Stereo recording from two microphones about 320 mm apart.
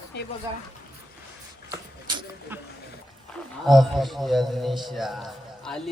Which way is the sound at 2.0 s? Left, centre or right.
Centre.